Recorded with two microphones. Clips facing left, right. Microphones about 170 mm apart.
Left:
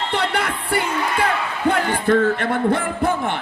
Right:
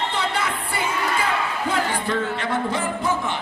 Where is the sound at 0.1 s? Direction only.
65° left (ahead or behind).